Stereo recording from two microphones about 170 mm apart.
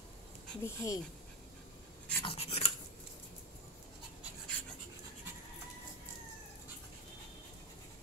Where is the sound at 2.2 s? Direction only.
35° left (ahead or behind).